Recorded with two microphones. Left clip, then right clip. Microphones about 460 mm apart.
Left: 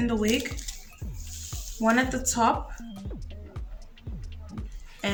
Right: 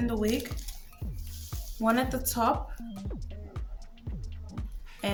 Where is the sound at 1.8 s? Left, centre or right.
Right.